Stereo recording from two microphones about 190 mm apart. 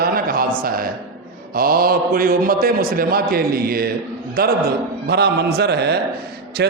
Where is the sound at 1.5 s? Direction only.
50° right (ahead or behind).